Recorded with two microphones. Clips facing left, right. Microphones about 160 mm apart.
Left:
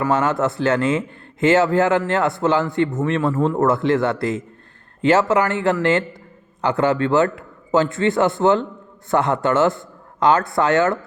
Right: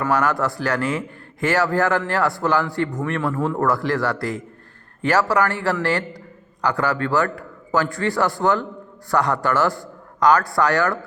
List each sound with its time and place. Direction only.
0.1 s a man's voice: 25° left (ahead or behind)